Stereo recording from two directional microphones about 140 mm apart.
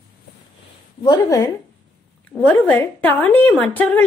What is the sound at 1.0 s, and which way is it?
Speech, 25° left (ahead or behind).